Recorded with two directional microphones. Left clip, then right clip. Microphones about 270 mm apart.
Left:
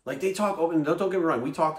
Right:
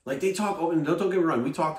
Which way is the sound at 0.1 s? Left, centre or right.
Centre.